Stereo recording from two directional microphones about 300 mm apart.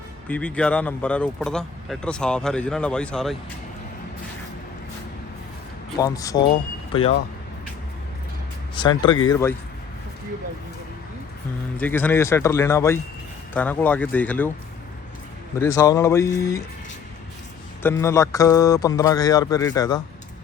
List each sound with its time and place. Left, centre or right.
0.3 s speech: centre
6.0 s speech: centre
8.7 s speech: centre
11.8 s speech: centre
15.5 s speech: centre
18.0 s speech: centre